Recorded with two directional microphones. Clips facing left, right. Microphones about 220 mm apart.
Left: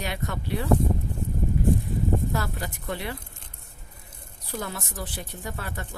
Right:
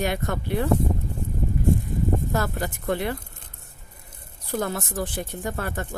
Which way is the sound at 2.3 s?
50° right (ahead or behind).